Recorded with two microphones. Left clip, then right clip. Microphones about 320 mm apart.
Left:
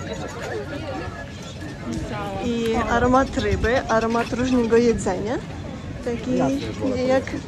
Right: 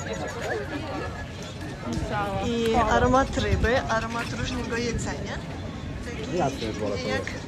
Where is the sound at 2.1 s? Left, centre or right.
Centre.